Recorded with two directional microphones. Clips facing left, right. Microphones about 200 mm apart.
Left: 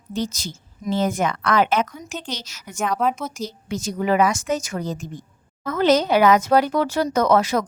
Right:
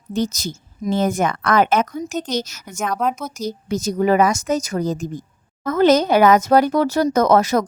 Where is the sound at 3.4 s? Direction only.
40° right (ahead or behind).